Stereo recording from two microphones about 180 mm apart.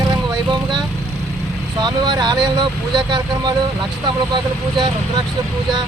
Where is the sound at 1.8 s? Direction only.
20° right (ahead or behind).